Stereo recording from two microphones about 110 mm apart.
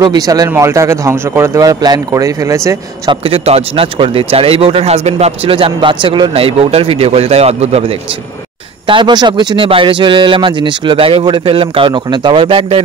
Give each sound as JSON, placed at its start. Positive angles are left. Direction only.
{"t": 0.0, "sound": "speech", "side_deg": -35}
{"t": 0.6, "sound": "speech", "side_deg": -25}
{"t": 3.1, "sound": "speech", "side_deg": -60}
{"t": 6.3, "sound": "a man's voice", "side_deg": -60}
{"t": 8.8, "sound": "a man's voice", "side_deg": -45}
{"t": 9.7, "sound": "a man's voice", "side_deg": -50}